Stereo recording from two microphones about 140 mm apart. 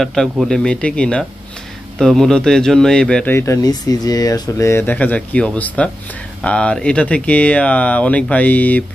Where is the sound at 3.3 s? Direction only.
20° left (ahead or behind).